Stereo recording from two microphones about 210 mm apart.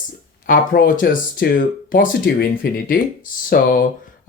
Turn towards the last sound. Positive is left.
turn(degrees=45)  # may be behind; listen again after turning